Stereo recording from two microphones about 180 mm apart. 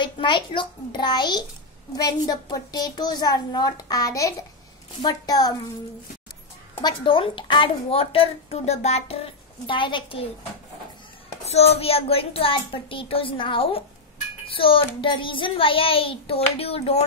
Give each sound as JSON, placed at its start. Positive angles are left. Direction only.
{"t": 0.0, "sound": "a woman's voice", "side_deg": 25}
{"t": 6.8, "sound": "a woman's voice", "side_deg": 25}
{"t": 11.4, "sound": "a child's voice", "side_deg": 35}